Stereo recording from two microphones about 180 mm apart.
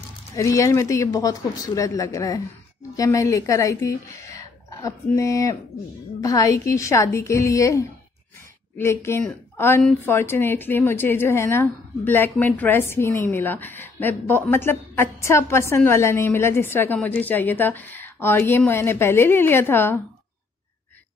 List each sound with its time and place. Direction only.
0.4 s speech: 15° left (ahead or behind)